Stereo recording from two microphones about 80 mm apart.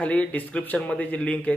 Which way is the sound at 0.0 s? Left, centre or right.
Centre.